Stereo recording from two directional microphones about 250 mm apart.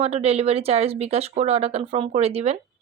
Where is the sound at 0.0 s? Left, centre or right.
Right.